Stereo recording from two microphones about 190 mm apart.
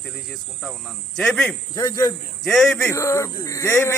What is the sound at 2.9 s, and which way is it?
Speech, 15° left (ahead or behind).